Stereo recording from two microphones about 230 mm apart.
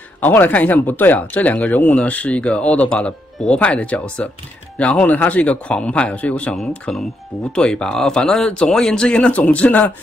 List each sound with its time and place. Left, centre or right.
0.2 s a man's voice: centre